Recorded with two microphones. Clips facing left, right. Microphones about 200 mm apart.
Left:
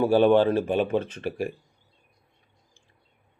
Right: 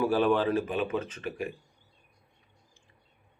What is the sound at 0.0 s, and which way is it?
Speech, 30° left (ahead or behind).